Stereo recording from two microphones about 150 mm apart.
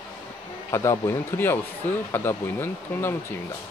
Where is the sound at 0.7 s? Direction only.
20° left (ahead or behind).